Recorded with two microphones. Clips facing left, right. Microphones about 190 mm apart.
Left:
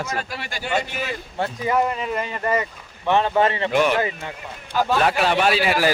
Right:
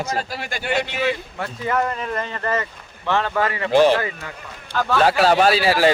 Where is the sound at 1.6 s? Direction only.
10° left (ahead or behind); by 3.7 s 25° left (ahead or behind).